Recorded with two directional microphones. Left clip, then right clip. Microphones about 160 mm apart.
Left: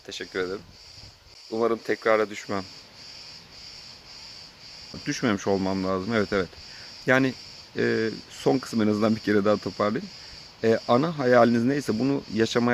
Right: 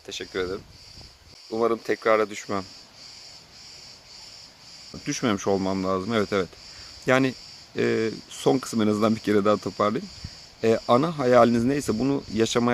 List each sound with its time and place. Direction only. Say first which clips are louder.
0.1 s speech: right 1 dB; 20° right (ahead or behind)
5.0 s speech: right 1 dB; 20° right (ahead or behind)